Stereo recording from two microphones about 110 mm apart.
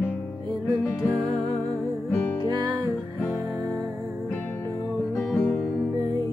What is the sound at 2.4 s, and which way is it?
Music, 40° right (ahead or behind).